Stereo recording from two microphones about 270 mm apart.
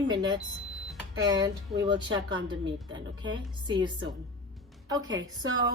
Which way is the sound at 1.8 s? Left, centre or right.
Centre.